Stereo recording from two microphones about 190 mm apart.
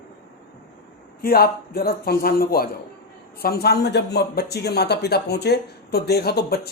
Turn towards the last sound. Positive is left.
turn(degrees=55)  # may be behind; listen again after turning